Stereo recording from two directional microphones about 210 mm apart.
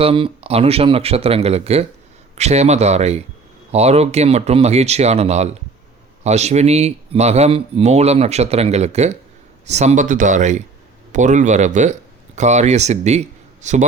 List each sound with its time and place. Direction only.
0.0 s speech: 25° right (ahead or behind)